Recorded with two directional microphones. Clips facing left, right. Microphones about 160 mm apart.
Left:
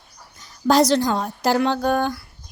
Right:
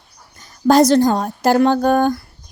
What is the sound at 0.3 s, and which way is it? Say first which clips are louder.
A woman's voice: right 5 dB; 50° right (ahead or behind).